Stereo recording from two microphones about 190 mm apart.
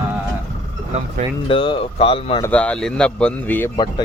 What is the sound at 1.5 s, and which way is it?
Speech, 25° left (ahead or behind).